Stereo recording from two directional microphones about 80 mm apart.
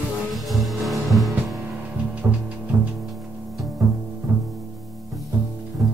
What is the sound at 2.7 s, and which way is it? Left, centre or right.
Music, right.